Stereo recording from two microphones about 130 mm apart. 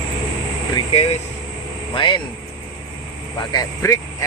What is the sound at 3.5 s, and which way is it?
Speech, 25° left (ahead or behind).